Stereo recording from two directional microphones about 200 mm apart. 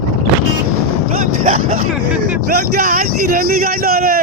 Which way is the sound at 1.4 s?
45° right (ahead or behind).